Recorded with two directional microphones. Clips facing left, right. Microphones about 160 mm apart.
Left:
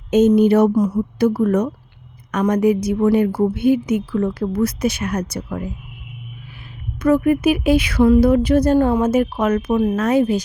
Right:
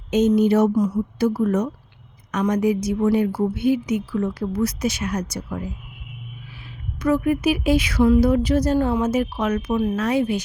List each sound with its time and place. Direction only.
0.1 s a woman's voice: 50° left (ahead or behind)
7.0 s speech: 55° left (ahead or behind)